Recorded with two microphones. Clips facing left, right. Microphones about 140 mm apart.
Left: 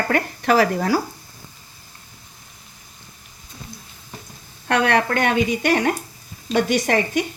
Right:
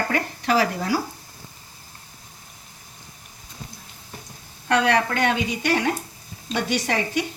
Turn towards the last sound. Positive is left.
turn(degrees=50)  # may be behind; listen again after turning